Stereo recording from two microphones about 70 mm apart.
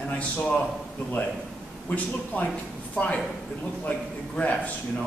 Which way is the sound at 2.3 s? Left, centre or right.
Left.